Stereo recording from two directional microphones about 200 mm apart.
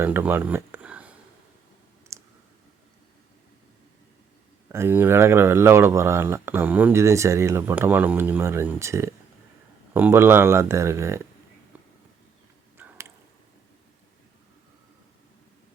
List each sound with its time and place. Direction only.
0.0 s speech: 10° right (ahead or behind)
2.1 s clicking: 15° right (ahead or behind)
4.7 s speech: 10° right (ahead or behind)
11.7 s a sound: 10° right (ahead or behind)